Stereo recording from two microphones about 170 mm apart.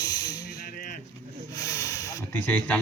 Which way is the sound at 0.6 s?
55° left (ahead or behind).